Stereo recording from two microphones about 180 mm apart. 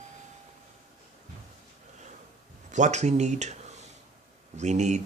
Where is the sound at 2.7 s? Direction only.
40° right (ahead or behind).